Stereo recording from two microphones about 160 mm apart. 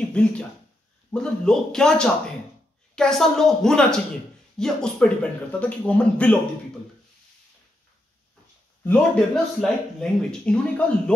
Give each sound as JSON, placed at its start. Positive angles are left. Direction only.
{"t": 0.1, "sound": "a woman's voice", "side_deg": 5}
{"t": 8.8, "sound": "speech", "side_deg": 5}